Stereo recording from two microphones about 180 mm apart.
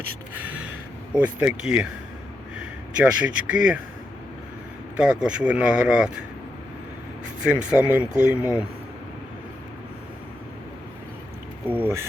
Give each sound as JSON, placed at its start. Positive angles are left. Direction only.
{"t": 0.3, "sound": "gasp", "side_deg": -10}
{"t": 1.1, "sound": "speech", "side_deg": -10}
{"t": 4.9, "sound": "speech", "side_deg": -5}
{"t": 7.4, "sound": "speech", "side_deg": -5}
{"t": 11.6, "sound": "speech", "side_deg": -10}